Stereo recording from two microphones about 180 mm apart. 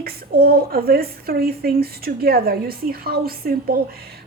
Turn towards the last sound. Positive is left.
turn(degrees=-55)  # may be behind; listen again after turning